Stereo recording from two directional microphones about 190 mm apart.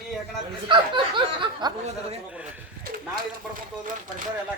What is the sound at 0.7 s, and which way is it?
Snicker, 25° right (ahead or behind).